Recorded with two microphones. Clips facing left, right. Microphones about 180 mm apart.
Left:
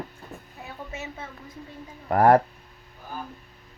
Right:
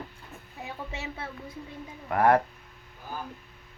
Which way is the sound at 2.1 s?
35° left (ahead or behind).